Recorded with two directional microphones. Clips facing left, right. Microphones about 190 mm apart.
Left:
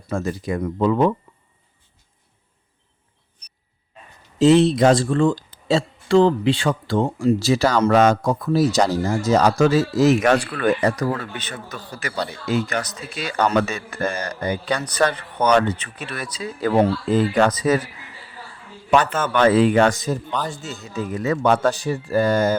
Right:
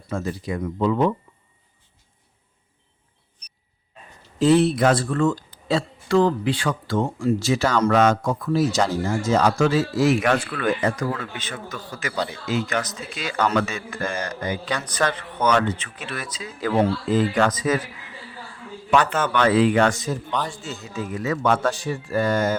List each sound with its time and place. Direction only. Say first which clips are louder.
0.1 s speech: left 3 dB; 45° left (ahead or behind)
4.4 s a man's voice: left 3 dB; 25° left (ahead or behind)
18.9 s a man's voice: left 1 dB; 40° left (ahead or behind)